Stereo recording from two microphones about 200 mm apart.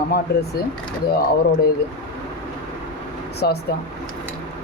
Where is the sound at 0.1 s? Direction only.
50° left (ahead or behind).